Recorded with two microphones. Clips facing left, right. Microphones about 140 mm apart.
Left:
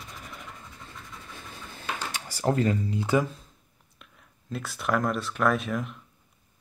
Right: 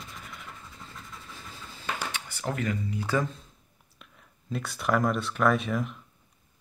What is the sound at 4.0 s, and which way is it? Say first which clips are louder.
Speech: even; centre (ahead or behind).